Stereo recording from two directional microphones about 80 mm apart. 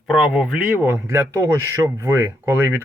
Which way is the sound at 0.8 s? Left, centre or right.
Right.